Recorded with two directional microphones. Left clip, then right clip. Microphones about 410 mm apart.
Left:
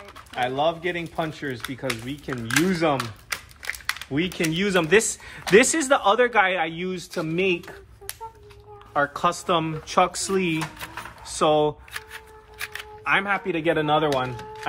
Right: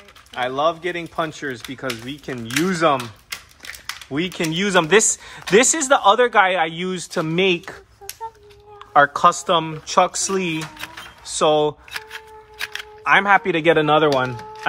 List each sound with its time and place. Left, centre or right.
0.4 s speech: centre
4.1 s speech: centre
8.9 s speech: centre